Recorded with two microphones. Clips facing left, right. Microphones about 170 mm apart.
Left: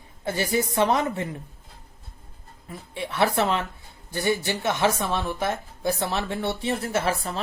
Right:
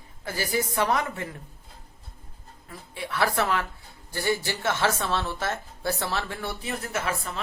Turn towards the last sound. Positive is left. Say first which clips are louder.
# left 5 dB
turn(degrees=35)  # may be behind; listen again after turning